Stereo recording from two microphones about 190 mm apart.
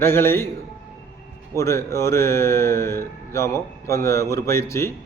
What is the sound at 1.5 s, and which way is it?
A man's voice, 15° left (ahead or behind).